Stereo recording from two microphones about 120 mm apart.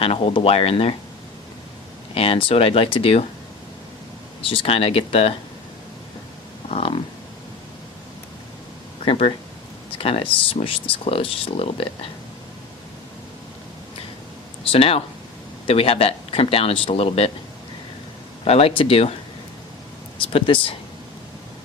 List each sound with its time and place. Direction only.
0.0 s speech: 50° left (ahead or behind)
2.1 s speech: 50° left (ahead or behind)
4.4 s speech: 50° left (ahead or behind)
6.7 s speech: 55° left (ahead or behind)
9.0 s speech: 55° left (ahead or behind)
14.7 s speech: 55° left (ahead or behind)
18.4 s speech: 55° left (ahead or behind)
20.3 s speech: 45° left (ahead or behind)